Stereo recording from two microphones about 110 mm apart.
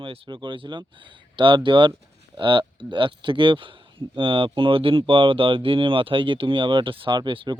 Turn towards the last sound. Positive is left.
turn(degrees=-50)  # may be behind; listen again after turning